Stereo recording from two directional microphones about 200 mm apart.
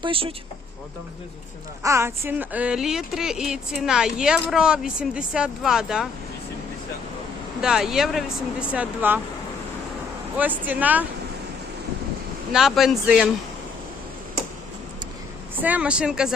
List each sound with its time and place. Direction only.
0.0 s speech: 25° right (ahead or behind)
1.8 s speech: 15° right (ahead or behind)
7.6 s speech: 5° right (ahead or behind)
10.3 s speech: 10° right (ahead or behind)
12.5 s speech: centre (ahead or behind)
15.5 s speech: 10° right (ahead or behind)